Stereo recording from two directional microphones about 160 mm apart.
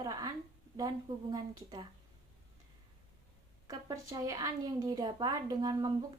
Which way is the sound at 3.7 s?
20° right (ahead or behind).